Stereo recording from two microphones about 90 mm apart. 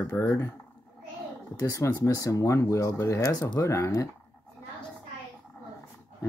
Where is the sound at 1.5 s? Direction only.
40° left (ahead or behind).